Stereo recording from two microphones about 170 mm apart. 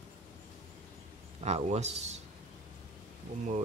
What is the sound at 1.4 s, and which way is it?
Speech, 40° right (ahead or behind).